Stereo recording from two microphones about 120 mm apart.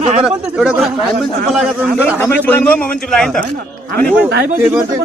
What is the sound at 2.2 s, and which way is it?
A man's voice, 15° left (ahead or behind).